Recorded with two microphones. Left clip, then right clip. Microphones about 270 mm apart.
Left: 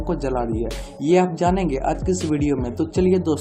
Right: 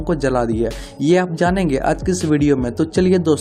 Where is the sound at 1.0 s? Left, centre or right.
Right.